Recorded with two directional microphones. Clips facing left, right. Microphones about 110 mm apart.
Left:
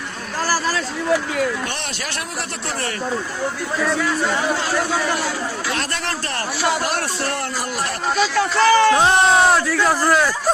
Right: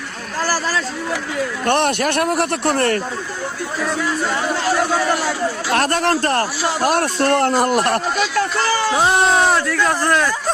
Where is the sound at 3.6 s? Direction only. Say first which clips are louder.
Even; centre (ahead or behind).